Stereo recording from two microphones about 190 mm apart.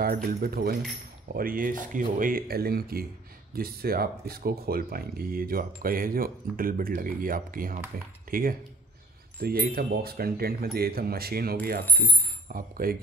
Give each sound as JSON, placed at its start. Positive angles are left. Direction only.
{"t": 0.0, "sound": "speech", "side_deg": -50}
{"t": 11.8, "sound": "speech", "side_deg": 10}
{"t": 12.4, "sound": "speech", "side_deg": -50}